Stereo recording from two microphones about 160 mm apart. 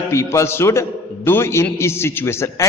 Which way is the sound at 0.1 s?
20° left (ahead or behind).